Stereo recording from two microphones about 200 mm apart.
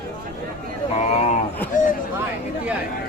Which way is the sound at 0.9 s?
35° left (ahead or behind).